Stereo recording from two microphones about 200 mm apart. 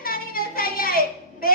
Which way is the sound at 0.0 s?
45° left (ahead or behind).